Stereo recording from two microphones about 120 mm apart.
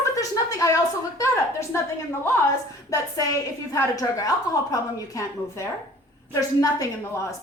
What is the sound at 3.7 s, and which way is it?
A woman's voice, 30° left (ahead or behind).